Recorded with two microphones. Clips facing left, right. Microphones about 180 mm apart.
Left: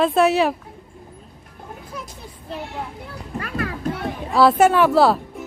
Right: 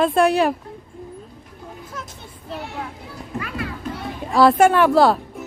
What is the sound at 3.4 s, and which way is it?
Music, 55° left (ahead or behind).